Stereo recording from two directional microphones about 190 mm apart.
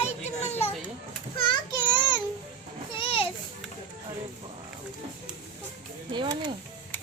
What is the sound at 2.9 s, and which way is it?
Children playing, 30° left (ahead or behind).